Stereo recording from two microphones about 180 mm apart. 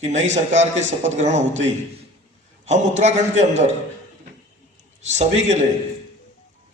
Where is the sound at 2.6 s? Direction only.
40° right (ahead or behind).